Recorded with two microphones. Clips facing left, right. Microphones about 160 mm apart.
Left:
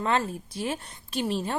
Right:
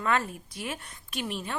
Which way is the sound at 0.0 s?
25° left (ahead or behind).